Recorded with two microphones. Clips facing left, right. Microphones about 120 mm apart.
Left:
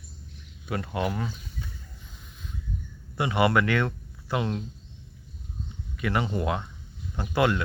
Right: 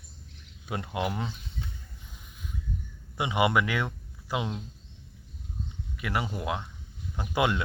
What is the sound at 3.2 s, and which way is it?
Speech, 15° right (ahead or behind).